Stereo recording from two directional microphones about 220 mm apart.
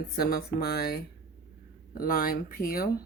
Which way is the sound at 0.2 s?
45° left (ahead or behind).